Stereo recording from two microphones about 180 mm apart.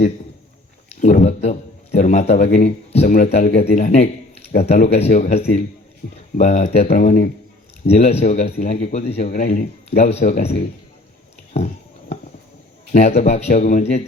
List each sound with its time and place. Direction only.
1.0 s a man's voice: 40° left (ahead or behind)
9.3 s speech: 45° left (ahead or behind)
11.5 s a sound: 35° left (ahead or behind)
12.9 s speech: 40° left (ahead or behind)